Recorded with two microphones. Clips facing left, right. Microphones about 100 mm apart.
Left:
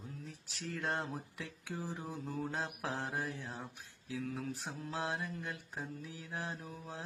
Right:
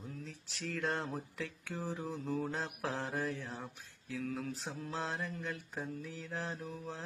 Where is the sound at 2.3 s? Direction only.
20° left (ahead or behind).